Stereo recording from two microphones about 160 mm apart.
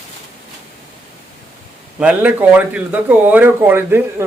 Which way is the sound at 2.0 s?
10° right (ahead or behind).